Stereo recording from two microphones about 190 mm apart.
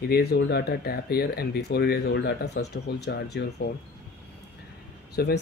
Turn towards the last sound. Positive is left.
turn(degrees=55)  # may be behind; listen again after turning